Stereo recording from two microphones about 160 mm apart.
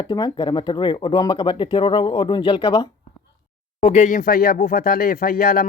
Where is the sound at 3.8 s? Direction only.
45° left (ahead or behind); by 5.6 s 65° left (ahead or behind).